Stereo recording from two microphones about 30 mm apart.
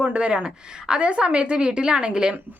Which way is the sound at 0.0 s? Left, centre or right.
Right.